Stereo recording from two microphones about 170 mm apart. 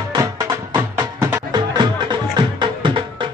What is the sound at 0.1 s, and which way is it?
Music, 20° right (ahead or behind).